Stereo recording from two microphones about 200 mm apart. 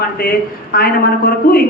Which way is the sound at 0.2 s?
45° left (ahead or behind).